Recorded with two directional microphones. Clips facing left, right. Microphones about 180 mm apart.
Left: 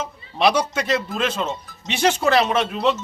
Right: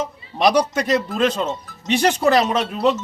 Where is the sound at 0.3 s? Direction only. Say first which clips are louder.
Right 2 dB; 15° right (ahead or behind).